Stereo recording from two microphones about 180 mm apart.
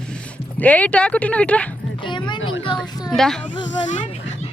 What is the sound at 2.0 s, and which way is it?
Music, 25° left (ahead or behind).